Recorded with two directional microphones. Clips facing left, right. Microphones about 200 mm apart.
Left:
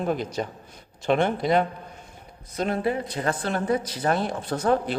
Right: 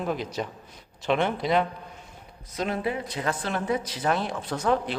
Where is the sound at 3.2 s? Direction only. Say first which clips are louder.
Left 1 dB; 40° left (ahead or behind).